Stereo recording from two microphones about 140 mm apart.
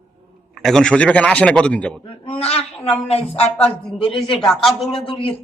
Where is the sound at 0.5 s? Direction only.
Centre (ahead or behind).